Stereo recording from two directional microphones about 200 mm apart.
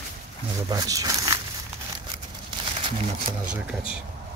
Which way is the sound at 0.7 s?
15° right (ahead or behind).